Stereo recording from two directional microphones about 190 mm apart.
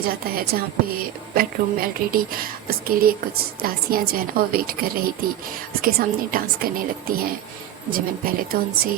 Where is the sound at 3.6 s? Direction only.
50° right (ahead or behind).